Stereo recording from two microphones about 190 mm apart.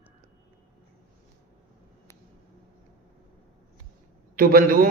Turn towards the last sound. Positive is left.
turn(degrees=-50)  # may be behind; listen again after turning